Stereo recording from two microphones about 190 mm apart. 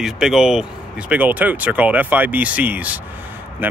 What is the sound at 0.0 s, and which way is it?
Speech, 5° right (ahead or behind).